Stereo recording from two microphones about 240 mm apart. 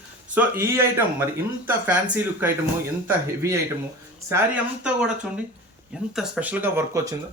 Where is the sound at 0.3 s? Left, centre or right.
Centre.